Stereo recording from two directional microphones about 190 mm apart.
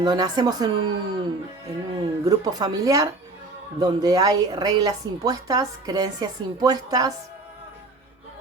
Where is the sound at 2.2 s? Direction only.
20° right (ahead or behind).